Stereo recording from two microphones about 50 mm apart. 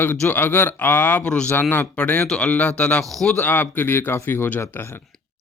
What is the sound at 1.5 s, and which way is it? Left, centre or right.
Speech, left.